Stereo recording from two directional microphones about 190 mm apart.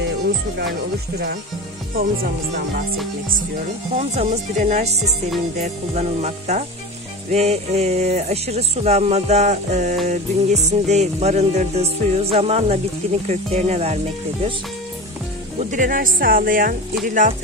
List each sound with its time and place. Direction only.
2.0 s speech: 50° right (ahead or behind)
3.9 s music: 35° right (ahead or behind)
15.7 s speech: 45° right (ahead or behind)